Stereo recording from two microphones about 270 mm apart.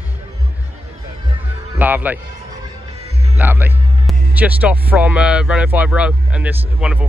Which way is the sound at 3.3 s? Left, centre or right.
Centre.